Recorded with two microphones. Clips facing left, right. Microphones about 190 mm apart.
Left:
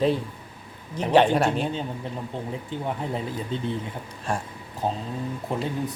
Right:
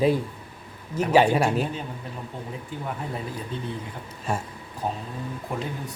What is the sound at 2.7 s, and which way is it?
Speech, 25° left (ahead or behind).